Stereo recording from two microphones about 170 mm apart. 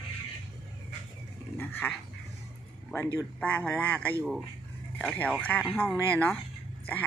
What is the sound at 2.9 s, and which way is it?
Speech, 10° left (ahead or behind).